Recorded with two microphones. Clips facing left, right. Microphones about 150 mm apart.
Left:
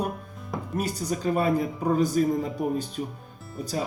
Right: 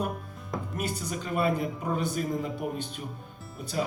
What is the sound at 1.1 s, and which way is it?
Speech, 40° left (ahead or behind).